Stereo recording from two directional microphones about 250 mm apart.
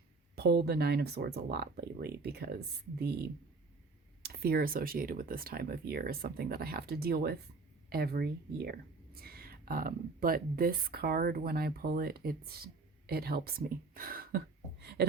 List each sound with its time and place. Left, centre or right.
0.3 s speech: right